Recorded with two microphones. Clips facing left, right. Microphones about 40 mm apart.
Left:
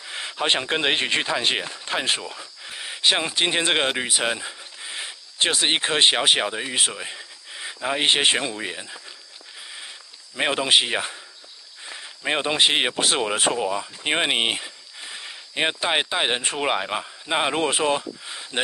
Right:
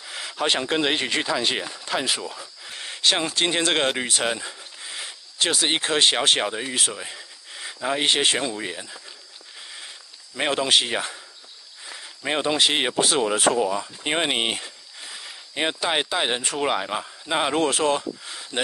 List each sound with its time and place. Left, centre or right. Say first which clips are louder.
0.0 s speech: even; left
2.7 s speech: left 1 dB; centre
8.4 s speech: even; centre
9.7 s a sound: left 2 dB; centre
11.8 s speech: left 2 dB; centre